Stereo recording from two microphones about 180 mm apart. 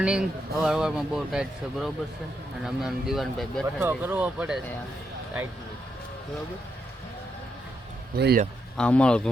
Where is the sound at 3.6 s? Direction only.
10° right (ahead or behind).